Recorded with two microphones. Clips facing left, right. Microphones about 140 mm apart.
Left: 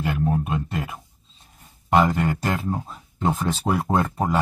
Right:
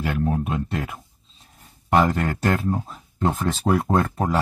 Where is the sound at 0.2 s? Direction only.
5° left (ahead or behind).